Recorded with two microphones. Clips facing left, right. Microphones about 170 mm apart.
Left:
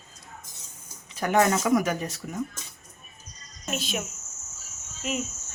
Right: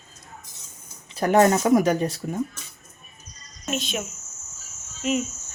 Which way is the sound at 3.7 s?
Centre (ahead or behind).